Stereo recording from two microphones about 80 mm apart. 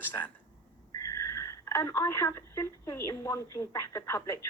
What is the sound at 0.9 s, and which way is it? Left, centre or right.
Speech, left.